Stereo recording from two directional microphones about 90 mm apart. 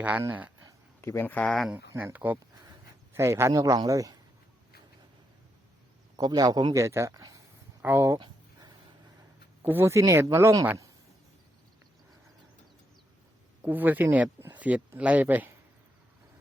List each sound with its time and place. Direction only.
0.0 s speech: 20° right (ahead or behind)
1.0 s speech: 30° left (ahead or behind)
1.5 s speech: centre (ahead or behind)
2.1 s speech: 20° right (ahead or behind)
3.1 s speech: 30° right (ahead or behind)
6.1 s a man's voice: 45° right (ahead or behind)
6.7 s speech: 30° right (ahead or behind)
7.2 s a sound: 45° right (ahead or behind)
7.8 s speech: 25° right (ahead or behind)
9.6 s speech: 30° right (ahead or behind)
13.6 s speech: 20° right (ahead or behind)